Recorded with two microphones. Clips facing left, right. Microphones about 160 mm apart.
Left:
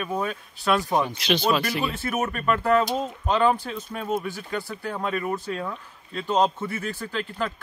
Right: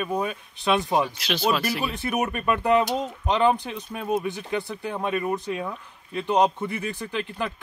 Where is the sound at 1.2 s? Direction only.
Centre (ahead or behind).